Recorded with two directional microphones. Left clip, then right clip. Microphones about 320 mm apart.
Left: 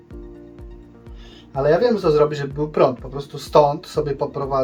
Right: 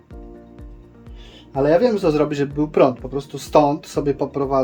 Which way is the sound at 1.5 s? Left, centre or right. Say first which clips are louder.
Right 1 dB; right.